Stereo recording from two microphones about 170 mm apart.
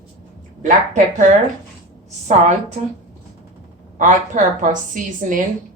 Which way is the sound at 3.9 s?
50° right (ahead or behind).